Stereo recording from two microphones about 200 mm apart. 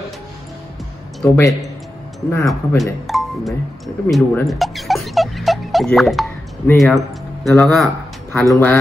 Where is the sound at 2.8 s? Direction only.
Centre (ahead or behind).